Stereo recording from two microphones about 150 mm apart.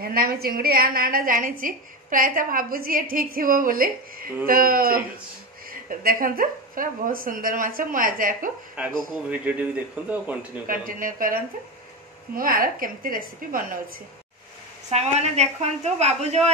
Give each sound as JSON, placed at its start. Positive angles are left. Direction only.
{"t": 0.0, "sound": "a woman's voice", "side_deg": -80}
{"t": 8.8, "sound": "speech", "side_deg": -5}
{"t": 10.7, "sound": "a woman's voice", "side_deg": -70}
{"t": 14.9, "sound": "a woman's voice", "side_deg": -45}